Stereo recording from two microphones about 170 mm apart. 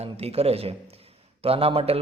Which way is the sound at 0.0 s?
35° right (ahead or behind).